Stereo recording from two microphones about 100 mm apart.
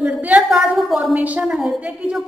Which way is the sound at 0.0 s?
15° right (ahead or behind).